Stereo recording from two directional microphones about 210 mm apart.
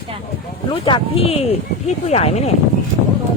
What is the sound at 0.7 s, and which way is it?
Speech, 25° left (ahead or behind).